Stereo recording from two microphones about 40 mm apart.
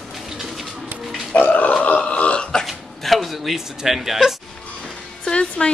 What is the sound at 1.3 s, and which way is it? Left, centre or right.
Speech, left.